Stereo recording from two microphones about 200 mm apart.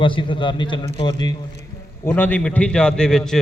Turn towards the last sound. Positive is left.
turn(degrees=5)  # may be behind; listen again after turning